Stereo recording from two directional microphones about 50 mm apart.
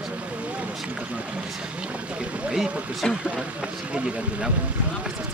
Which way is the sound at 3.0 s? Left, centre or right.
Centre.